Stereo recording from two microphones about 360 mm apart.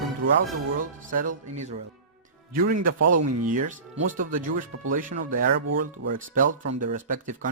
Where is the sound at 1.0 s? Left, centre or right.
Right.